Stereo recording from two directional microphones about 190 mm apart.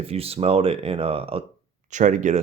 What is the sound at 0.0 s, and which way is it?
Speech, 30° right (ahead or behind).